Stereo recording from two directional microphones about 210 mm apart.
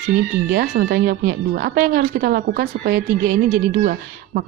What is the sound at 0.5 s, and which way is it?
A woman's voice, 45° right (ahead or behind).